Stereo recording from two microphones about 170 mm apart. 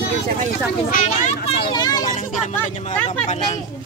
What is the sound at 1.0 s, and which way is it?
Speech, 40° left (ahead or behind).